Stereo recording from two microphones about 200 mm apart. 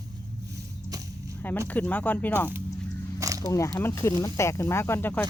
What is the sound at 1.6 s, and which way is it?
Speech, 10° left (ahead or behind).